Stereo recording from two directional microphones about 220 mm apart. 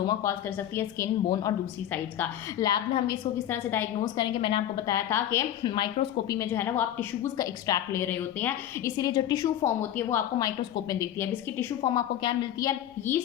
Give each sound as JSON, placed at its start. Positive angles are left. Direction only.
{"t": 0.1, "sound": "a woman's voice", "side_deg": 15}
{"t": 4.4, "sound": "a woman's voice", "side_deg": 25}
{"t": 4.9, "sound": "a woman's voice", "side_deg": 10}